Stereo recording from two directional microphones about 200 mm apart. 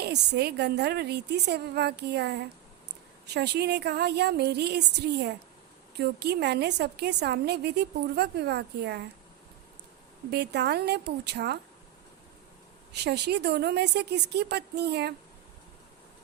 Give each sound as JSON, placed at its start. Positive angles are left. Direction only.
{"t": 0.0, "sound": "a woman's voice", "side_deg": -55}
{"t": 10.3, "sound": "a woman's voice", "side_deg": -55}
{"t": 12.9, "sound": "a woman's voice", "side_deg": -55}